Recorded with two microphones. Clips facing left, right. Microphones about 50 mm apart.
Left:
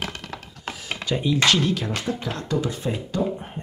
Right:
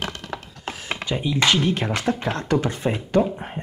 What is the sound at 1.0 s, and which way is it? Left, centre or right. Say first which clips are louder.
Speech: left 1 dB; centre.